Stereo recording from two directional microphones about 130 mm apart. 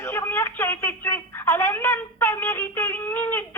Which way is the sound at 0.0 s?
20° left (ahead or behind).